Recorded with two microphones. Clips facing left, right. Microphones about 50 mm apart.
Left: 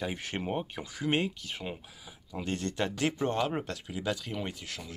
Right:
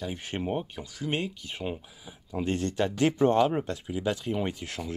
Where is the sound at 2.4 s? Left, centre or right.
Right.